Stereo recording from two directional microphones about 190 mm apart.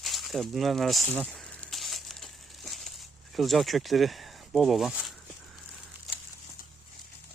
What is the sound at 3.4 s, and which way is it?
Speech, centre (ahead or behind).